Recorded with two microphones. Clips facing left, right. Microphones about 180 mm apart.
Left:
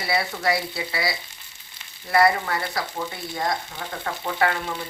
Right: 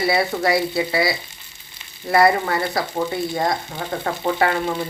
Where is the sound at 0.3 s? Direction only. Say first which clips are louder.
Right 6 dB; 45° right (ahead or behind).